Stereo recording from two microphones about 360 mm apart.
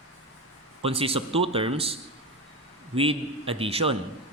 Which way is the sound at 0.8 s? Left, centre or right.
Centre.